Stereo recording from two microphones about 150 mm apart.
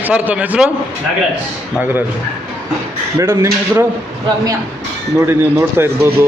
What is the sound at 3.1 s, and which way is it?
Speech, 15° right (ahead or behind).